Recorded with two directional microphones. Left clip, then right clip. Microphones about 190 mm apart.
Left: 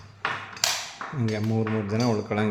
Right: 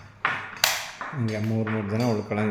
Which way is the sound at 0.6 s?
55° left (ahead or behind).